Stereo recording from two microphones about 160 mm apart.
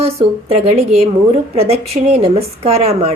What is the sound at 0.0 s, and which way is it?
A woman's voice, 40° right (ahead or behind).